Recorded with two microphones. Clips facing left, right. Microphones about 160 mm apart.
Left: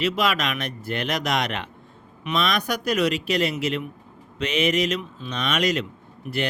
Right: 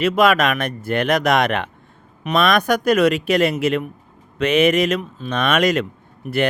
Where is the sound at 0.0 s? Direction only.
55° right (ahead or behind).